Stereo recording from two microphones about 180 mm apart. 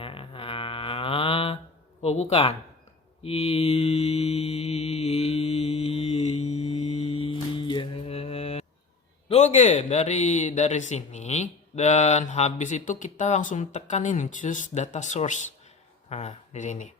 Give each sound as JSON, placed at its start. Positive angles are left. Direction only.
{"t": 0.0, "sound": "a sound", "side_deg": 30}
{"t": 2.3, "sound": "speech", "side_deg": 35}
{"t": 3.2, "sound": "mantra", "side_deg": 35}
{"t": 9.3, "sound": "speech", "side_deg": 40}